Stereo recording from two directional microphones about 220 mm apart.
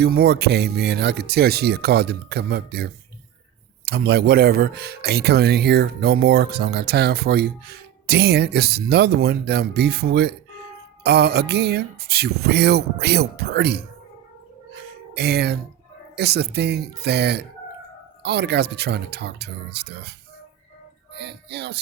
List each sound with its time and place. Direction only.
0.0 s speech: 45° right (ahead or behind)
15.1 s speech: 50° right (ahead or behind)
21.2 s speech: 50° right (ahead or behind)